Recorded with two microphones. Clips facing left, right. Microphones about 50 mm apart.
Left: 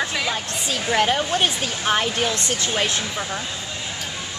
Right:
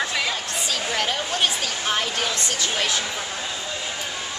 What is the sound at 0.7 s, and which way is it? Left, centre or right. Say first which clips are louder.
Speech: left 6 dB; left.